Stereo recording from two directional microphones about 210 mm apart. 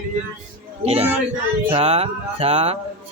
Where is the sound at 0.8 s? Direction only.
30° right (ahead or behind).